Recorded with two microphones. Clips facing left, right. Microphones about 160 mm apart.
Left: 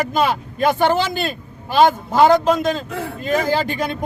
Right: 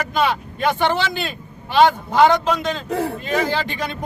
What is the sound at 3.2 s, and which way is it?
Speech, 45° left (ahead or behind).